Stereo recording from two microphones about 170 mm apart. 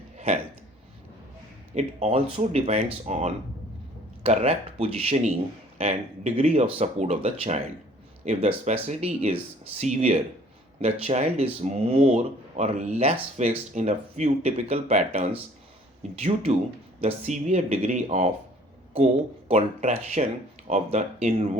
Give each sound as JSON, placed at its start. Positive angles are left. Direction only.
{"t": 1.7, "sound": "speech", "side_deg": -40}